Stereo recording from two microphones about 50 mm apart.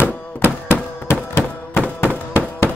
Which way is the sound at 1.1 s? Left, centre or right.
Left.